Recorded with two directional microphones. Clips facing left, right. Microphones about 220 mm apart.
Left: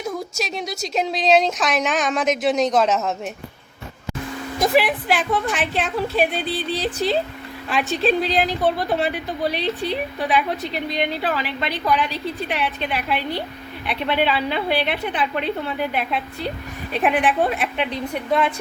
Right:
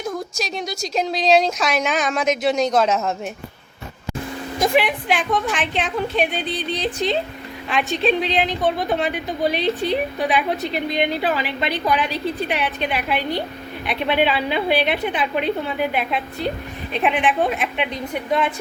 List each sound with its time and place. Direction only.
0.0 s speech: 5° left (ahead or behind)
4.6 s speech: centre (ahead or behind)